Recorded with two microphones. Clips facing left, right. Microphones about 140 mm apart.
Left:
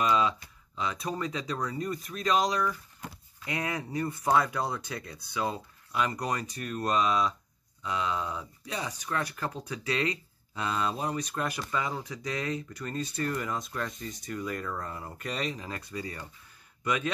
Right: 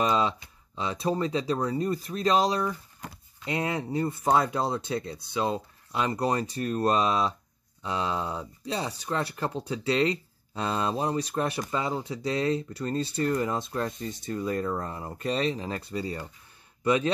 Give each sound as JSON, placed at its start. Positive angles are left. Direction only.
{"t": 0.0, "sound": "speech", "side_deg": -30}